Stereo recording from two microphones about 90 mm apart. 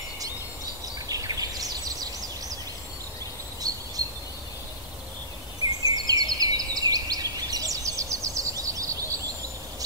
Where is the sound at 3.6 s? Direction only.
45° right (ahead or behind).